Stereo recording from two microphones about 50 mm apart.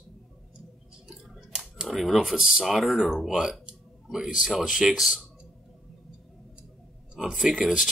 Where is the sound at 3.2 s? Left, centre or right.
Centre.